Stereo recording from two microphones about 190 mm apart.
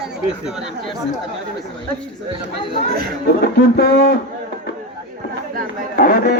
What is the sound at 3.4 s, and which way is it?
Speech, 55° left (ahead or behind).